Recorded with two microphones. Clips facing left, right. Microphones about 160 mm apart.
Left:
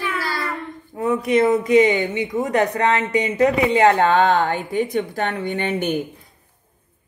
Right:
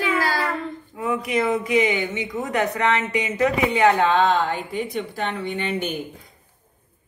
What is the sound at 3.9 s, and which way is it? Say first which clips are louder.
Speech: left 2 dB; 50° left (ahead or behind).